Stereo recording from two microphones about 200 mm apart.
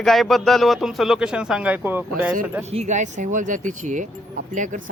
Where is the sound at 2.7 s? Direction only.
35° right (ahead or behind).